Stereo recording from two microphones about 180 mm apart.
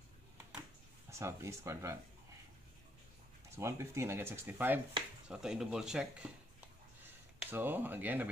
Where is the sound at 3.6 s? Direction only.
15° right (ahead or behind).